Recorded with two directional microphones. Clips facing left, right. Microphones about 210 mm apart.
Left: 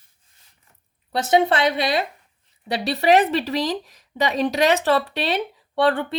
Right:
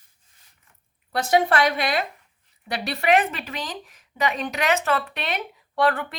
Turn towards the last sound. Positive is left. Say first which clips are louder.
# left 3 dB
turn(degrees=30)  # may be behind; listen again after turning